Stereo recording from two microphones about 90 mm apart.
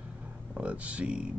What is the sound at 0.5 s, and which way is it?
Speech, 15° right (ahead or behind).